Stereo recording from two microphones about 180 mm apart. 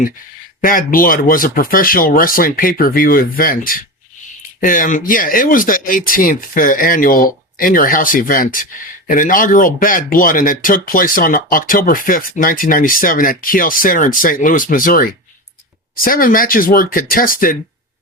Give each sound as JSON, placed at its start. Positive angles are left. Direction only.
{"t": 0.6, "sound": "speech", "side_deg": 50}